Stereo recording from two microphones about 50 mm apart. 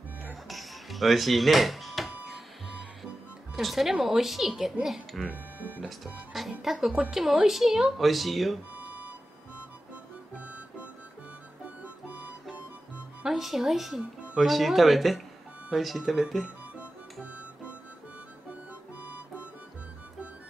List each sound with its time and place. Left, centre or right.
0.3 s music: centre
3.5 s speech: centre
5.3 s music: right
5.9 s speech: centre
8.7 s a sound: right
11.6 s music: right
13.2 s speech: centre
19.0 s music: right